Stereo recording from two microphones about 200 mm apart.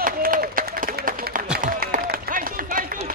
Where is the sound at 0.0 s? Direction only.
45° right (ahead or behind).